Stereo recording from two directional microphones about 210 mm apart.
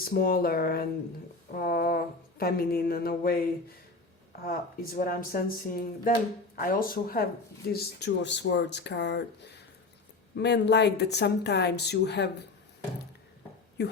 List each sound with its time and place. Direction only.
0.0 s speech: 45° left (ahead or behind)
4.4 s speech: 45° left (ahead or behind)
13.8 s a woman's voice: 50° left (ahead or behind)